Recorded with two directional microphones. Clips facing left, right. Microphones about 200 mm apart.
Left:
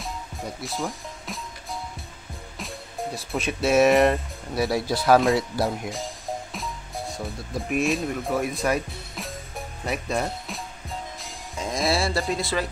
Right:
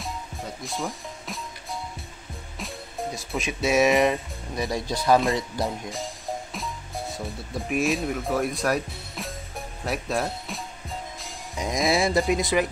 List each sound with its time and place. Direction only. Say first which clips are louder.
0.0 s music: left 1 dB; centre (ahead or behind)
3.3 s speech: left 2 dB; centre (ahead or behind)
5.9 s music: left 1 dB; centre (ahead or behind)
11.9 s speech: right 5 dB; 20° right (ahead or behind)